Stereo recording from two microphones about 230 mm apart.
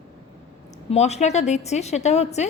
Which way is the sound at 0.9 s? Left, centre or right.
Left.